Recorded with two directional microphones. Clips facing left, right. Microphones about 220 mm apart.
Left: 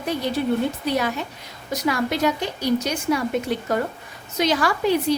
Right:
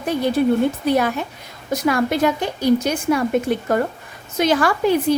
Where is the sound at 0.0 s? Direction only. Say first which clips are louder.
Right 5 dB; 50° right (ahead or behind).